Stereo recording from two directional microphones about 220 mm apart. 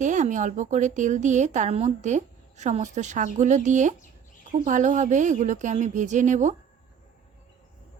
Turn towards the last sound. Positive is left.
turn(degrees=-35)  # may be behind; listen again after turning